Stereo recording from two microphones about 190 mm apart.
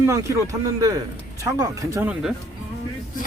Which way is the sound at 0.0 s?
15° right (ahead or behind).